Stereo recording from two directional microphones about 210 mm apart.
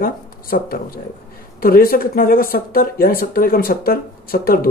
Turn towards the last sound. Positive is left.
turn(degrees=45)  # may be behind; listen again after turning